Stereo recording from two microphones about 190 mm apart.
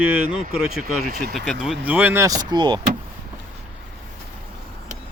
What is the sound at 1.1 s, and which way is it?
Speech, 50° right (ahead or behind).